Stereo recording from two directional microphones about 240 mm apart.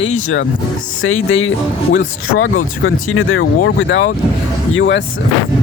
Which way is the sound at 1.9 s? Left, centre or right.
Left.